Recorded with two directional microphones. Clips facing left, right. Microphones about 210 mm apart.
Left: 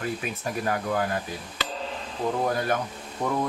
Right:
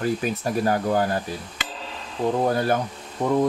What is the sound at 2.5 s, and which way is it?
Speech, 30° right (ahead or behind).